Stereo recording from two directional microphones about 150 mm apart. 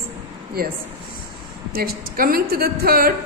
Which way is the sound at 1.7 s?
80° right.